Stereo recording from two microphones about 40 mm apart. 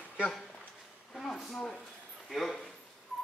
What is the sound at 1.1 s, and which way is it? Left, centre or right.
Speech, centre.